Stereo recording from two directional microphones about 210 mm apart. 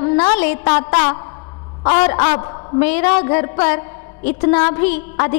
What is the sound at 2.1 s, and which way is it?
Speech, 25° left (ahead or behind).